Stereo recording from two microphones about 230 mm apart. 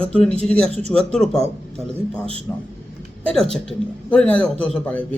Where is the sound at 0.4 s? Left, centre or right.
Centre.